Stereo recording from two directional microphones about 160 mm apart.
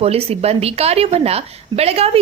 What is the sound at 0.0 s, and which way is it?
A woman's voice, 40° right (ahead or behind).